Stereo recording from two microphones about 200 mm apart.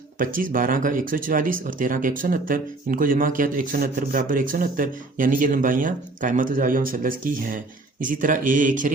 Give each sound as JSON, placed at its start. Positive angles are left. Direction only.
{"t": 0.2, "sound": "speech", "side_deg": -45}